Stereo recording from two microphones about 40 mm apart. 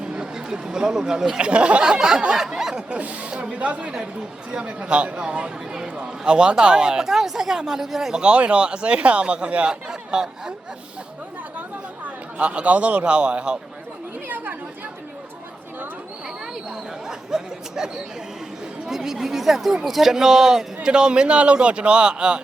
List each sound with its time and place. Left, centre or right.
0.0 s a sound: centre
1.4 s a man's voice: right
2.3 s snicker: centre
2.9 s a man's voice: right; by 8.2 s centre
8.2 s a man's voice: right
9.6 s speech: centre
12.4 s a man's voice: right
14.3 s speech: right
16.6 s speech: centre
20.8 s a man's voice: right